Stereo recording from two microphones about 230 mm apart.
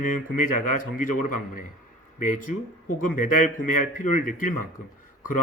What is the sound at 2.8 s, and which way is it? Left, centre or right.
A man's voice, left.